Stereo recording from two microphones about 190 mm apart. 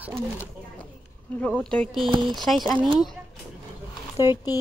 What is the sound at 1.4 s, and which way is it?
Speech, 5° left (ahead or behind).